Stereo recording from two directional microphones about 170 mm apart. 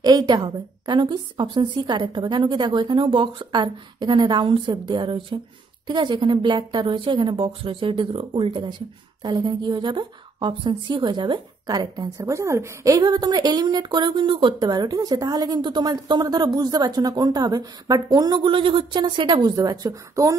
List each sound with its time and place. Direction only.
0.0 s a woman's voice: 25° right (ahead or behind)